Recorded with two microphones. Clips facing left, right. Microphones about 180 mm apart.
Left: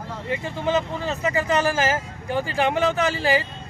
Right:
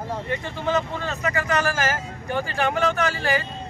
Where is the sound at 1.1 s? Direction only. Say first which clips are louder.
Left 3 dB; 25° left (ahead or behind).